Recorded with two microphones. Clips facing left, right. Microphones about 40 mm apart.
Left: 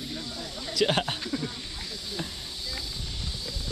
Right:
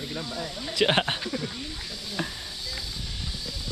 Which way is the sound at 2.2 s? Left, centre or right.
Right.